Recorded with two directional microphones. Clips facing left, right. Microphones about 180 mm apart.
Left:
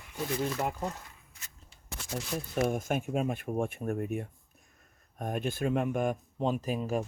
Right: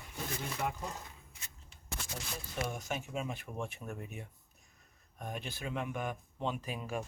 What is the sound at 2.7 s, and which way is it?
Speech, 50° left (ahead or behind).